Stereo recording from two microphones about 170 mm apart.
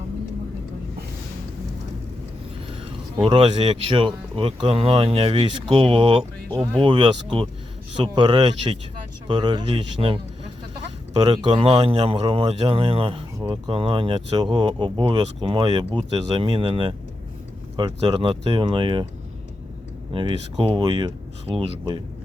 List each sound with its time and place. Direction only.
3.2 s speech: 30° right (ahead or behind)
11.3 s speech: 30° right (ahead or behind)
20.1 s speech: 30° right (ahead or behind)